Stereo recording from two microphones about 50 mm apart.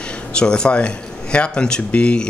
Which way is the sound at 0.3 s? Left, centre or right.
Centre.